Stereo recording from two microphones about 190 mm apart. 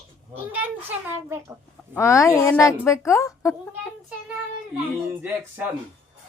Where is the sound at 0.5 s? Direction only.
10° right (ahead or behind).